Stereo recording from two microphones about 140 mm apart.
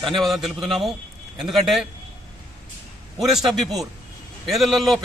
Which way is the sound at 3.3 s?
Centre (ahead or behind).